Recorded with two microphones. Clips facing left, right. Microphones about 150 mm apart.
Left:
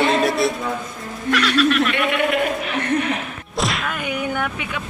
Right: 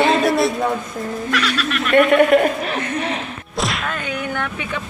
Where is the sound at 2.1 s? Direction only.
45° right (ahead or behind).